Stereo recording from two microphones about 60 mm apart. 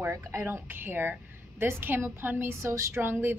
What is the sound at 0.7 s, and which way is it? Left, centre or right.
A woman's voice, right.